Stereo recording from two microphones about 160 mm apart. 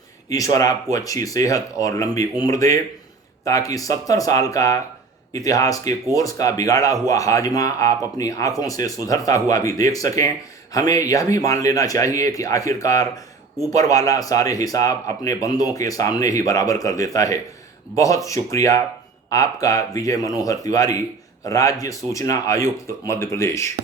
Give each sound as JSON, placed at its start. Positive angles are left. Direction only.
{"t": 0.3, "sound": "speech", "side_deg": 20}